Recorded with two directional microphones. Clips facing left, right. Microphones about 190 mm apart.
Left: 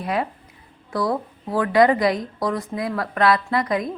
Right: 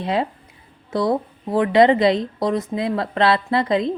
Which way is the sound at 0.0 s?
25° right (ahead or behind).